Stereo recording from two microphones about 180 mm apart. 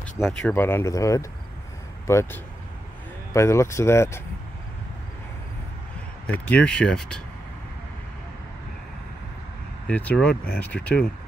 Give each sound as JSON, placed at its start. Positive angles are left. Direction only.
{"t": 0.0, "sound": "speech", "side_deg": 5}
{"t": 6.2, "sound": "speech", "side_deg": 5}
{"t": 9.8, "sound": "speech", "side_deg": 5}